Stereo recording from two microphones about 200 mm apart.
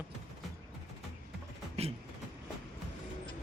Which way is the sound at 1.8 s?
30° right (ahead or behind).